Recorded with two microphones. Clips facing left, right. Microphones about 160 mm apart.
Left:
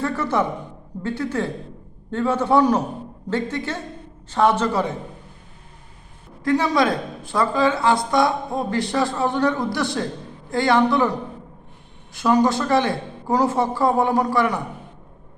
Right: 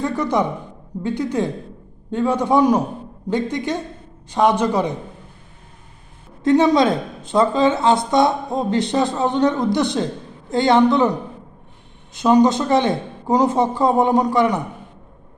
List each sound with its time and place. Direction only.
0.0 s a man's voice: 15° right (ahead or behind)
6.4 s a woman's voice: 20° right (ahead or behind)